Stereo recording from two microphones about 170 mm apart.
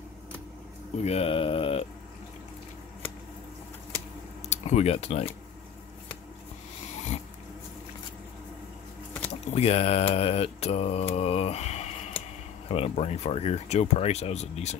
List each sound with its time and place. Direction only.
1.0 s speech: 35° left (ahead or behind)
4.5 s speech: 40° left (ahead or behind)
9.3 s mantra: 40° left (ahead or behind)
12.6 s speech: 35° left (ahead or behind)